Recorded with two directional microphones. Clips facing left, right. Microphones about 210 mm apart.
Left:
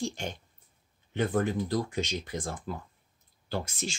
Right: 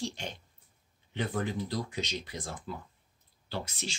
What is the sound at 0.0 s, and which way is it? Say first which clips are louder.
Speech: left 3 dB; 45° left (ahead or behind).